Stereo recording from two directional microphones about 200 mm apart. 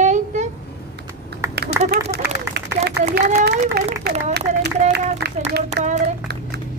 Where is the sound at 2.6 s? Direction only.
55° right (ahead or behind).